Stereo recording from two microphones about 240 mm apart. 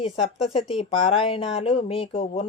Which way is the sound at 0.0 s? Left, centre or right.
Left.